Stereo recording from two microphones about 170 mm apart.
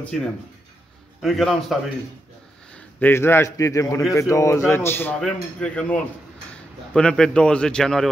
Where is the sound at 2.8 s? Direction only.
10° left (ahead or behind).